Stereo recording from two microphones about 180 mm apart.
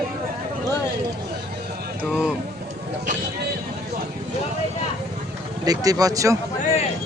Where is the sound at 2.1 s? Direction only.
5° right (ahead or behind).